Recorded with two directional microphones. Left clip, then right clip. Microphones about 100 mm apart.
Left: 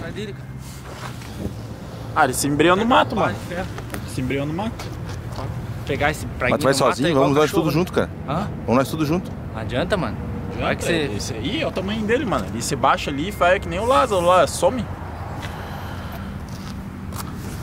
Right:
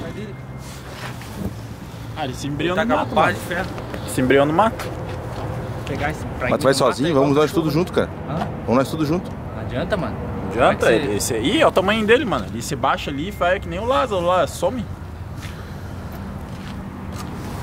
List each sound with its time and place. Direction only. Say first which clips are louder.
2.1 s speech: left 9 dB; 35° left (ahead or behind)
2.8 s speech: even; 40° right (ahead or behind)
5.9 s speech: left 4 dB; 5° left (ahead or behind)
10.6 s speech: right 6 dB; 35° right (ahead or behind)
12.3 s speech: even; centre (ahead or behind)